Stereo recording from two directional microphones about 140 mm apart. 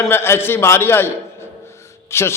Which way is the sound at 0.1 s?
15° left (ahead or behind).